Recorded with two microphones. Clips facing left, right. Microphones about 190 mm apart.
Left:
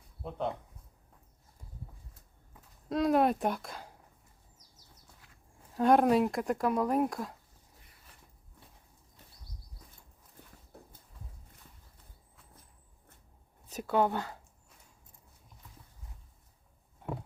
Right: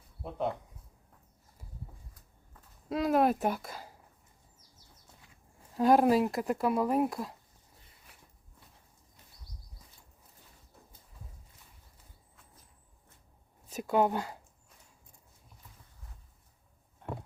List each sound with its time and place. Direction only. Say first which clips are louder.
0.2 s speech: left 1 dB; 5° right (ahead or behind)
2.9 s speech: even; centre (ahead or behind)
5.7 s speech: right 1 dB; 5° right (ahead or behind)
8.1 s walk: even; 10° right (ahead or behind)
13.7 s speech: right 1 dB; 10° right (ahead or behind)